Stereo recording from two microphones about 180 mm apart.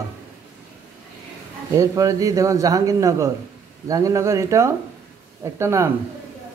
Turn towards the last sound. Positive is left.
turn(degrees=-15)  # may be behind; listen again after turning